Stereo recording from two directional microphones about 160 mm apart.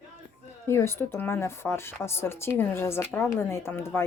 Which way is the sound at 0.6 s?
15° left (ahead or behind).